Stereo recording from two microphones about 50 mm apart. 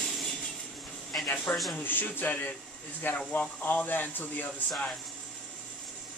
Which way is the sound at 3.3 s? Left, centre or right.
Left.